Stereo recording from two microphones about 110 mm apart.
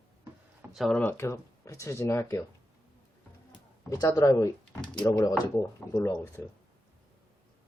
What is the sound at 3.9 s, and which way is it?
Speech, 30° left (ahead or behind).